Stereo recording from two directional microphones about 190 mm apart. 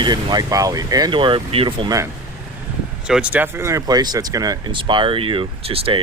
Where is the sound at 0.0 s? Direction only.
20° right (ahead or behind).